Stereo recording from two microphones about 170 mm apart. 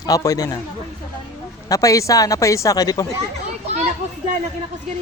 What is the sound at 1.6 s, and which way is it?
Speech, 20° left (ahead or behind).